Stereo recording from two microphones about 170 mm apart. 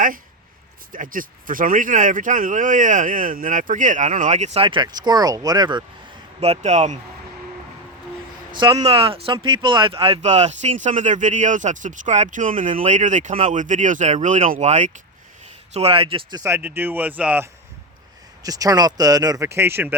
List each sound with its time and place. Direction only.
0.9 s speech: 55° right (ahead or behind); by 5.8 s 25° right (ahead or behind)
6.4 s speech: 40° right (ahead or behind)
8.5 s speech: 25° right (ahead or behind)
16.4 s speech: 15° right (ahead or behind)
18.4 s speech: 20° right (ahead or behind)